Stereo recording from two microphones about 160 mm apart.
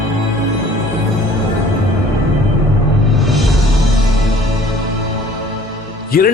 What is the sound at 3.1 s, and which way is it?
Music, centre (ahead or behind).